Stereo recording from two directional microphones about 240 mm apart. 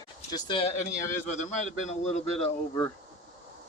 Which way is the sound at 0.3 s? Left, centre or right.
Centre.